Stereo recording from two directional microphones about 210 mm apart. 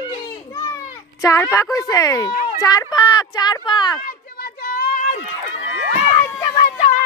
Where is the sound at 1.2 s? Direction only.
15° left (ahead or behind).